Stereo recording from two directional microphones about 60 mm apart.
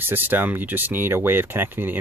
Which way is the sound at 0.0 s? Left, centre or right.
Right.